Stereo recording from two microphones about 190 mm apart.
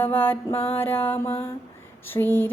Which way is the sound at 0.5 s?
30° left (ahead or behind).